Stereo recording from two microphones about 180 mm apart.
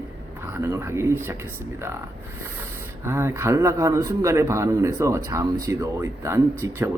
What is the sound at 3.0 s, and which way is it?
Speech, 15° right (ahead or behind).